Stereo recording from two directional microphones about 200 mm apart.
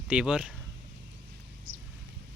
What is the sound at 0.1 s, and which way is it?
Speech, 5° right (ahead or behind).